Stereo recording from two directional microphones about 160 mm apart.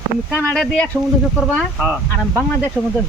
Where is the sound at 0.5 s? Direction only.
5° left (ahead or behind).